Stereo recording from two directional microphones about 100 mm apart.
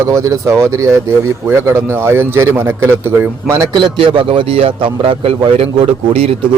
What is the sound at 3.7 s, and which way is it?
A man's voice, 55° right (ahead or behind).